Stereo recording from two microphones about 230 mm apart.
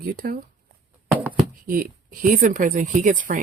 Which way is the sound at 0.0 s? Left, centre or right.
Right.